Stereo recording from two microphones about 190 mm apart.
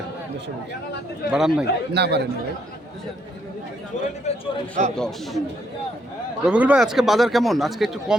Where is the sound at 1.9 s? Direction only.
60° right (ahead or behind).